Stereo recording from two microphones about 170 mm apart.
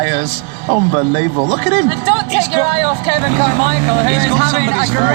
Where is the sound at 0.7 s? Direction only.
40° right (ahead or behind).